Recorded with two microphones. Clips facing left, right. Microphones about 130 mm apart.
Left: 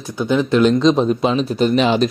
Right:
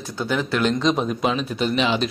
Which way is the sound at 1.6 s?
40° left (ahead or behind).